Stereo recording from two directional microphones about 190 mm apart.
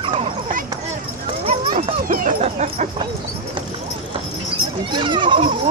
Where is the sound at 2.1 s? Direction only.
45° right (ahead or behind).